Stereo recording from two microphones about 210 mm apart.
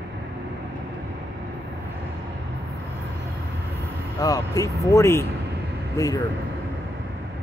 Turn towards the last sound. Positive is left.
turn(degrees=15)  # may be behind; listen again after turning